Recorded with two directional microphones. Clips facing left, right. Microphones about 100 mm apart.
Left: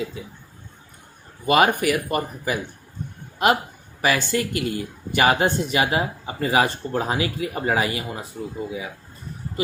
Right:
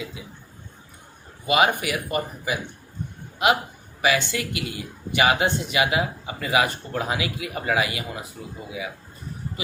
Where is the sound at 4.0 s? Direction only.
40° left (ahead or behind).